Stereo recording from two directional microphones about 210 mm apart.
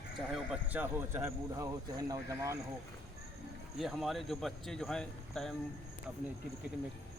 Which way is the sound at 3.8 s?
Centre (ahead or behind).